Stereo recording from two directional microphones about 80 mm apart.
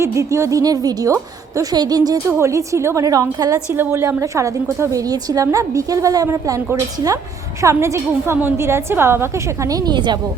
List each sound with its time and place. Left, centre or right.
0.0 s a woman's voice: right
1.7 s speech: right
2.2 s a woman's voice: right
3.0 s a woman's voice: right
7.6 s a woman's voice: right
9.6 s speech: right